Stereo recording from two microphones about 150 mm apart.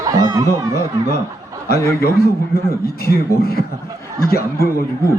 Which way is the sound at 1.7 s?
90° left.